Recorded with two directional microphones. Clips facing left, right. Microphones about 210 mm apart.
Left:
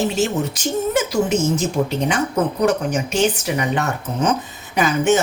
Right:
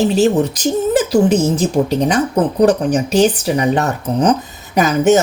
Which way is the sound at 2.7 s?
35° right (ahead or behind).